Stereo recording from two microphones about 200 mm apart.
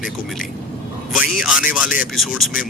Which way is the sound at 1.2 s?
5° right (ahead or behind).